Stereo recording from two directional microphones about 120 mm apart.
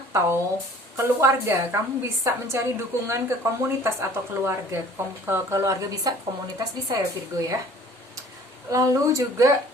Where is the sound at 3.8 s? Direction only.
20° right (ahead or behind).